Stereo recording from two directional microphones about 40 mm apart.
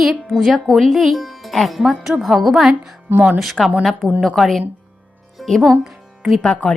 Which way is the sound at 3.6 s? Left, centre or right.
Centre.